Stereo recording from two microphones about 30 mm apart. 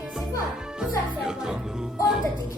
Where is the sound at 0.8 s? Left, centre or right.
Right.